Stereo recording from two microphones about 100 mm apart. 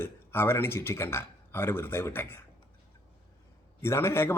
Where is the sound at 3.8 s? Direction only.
25° left (ahead or behind).